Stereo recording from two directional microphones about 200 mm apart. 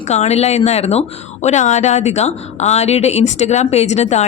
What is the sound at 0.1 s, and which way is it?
A woman's voice, 35° left (ahead or behind).